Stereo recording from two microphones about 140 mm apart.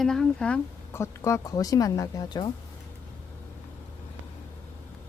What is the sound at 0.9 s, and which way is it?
Speech, 20° left (ahead or behind).